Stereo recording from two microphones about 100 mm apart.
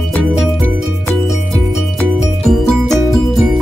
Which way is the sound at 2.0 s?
5° left (ahead or behind).